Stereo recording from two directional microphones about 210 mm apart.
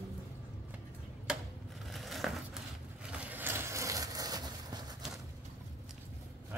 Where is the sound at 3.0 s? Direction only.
5° right (ahead or behind).